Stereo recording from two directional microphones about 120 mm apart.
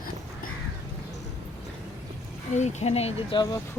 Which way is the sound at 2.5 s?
75° left (ahead or behind).